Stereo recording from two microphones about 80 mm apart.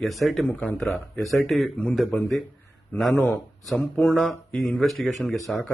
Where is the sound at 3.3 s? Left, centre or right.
Centre.